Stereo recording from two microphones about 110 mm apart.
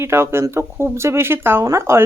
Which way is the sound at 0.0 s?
25° right (ahead or behind).